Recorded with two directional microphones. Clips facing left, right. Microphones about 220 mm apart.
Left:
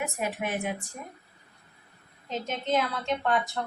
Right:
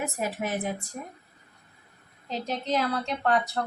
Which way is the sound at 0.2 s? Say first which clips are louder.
Right 1 dB; 40° right (ahead or behind).